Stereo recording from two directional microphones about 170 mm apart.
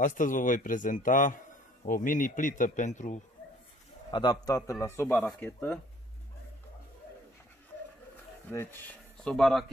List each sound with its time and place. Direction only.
0.0 s a man's voice: 50° left (ahead or behind)
4.1 s speech: 25° left (ahead or behind)
8.5 s speech: 15° left (ahead or behind)